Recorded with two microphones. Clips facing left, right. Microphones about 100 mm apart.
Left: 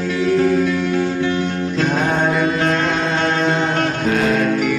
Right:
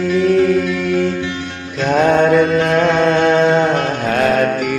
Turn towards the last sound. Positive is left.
turn(degrees=-55)  # may be behind; listen again after turning